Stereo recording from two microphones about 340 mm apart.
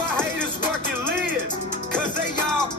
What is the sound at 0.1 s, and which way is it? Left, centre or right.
Music, centre.